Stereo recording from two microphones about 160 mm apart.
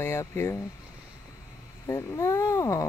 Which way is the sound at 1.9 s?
20° left (ahead or behind).